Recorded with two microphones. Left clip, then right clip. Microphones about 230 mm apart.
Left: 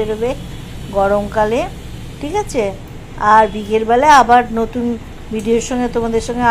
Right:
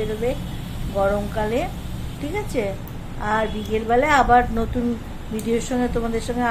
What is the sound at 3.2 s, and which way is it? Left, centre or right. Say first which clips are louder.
A woman's voice: left 13 dB; centre.